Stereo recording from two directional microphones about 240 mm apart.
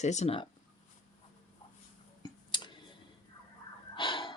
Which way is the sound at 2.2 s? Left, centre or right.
Centre.